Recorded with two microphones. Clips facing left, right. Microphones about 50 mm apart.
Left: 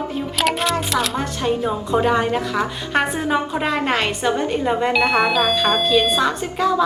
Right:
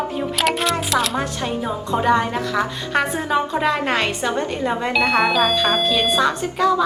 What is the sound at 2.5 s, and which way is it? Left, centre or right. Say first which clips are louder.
Speech: right 3 dB; centre.